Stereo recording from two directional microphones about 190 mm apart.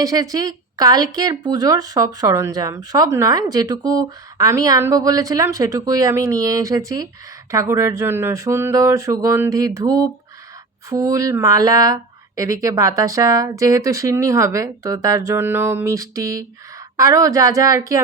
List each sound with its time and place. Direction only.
0.0 s speech: 20° right (ahead or behind)